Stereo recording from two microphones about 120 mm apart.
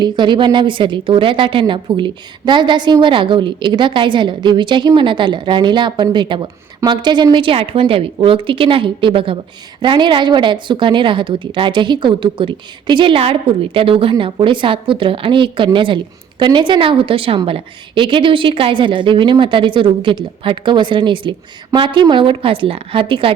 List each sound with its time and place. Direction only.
0.0 s a woman's voice: 40° right (ahead or behind)